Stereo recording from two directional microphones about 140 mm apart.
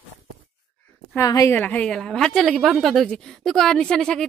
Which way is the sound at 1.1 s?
25° left (ahead or behind).